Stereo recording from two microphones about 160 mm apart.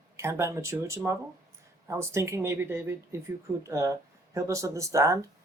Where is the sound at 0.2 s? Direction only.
15° right (ahead or behind).